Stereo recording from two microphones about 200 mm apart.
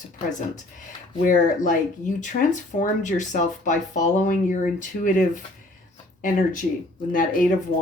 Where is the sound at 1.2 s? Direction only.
40° left (ahead or behind).